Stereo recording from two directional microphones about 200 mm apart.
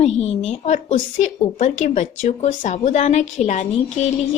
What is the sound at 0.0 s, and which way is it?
Speech, 30° left (ahead or behind).